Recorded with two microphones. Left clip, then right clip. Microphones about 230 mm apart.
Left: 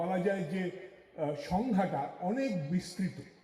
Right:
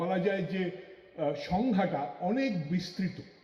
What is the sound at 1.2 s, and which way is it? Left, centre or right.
A man's voice, right.